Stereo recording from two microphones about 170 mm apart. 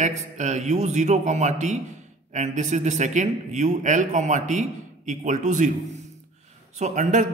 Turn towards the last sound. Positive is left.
turn(degrees=-45)  # may be behind; listen again after turning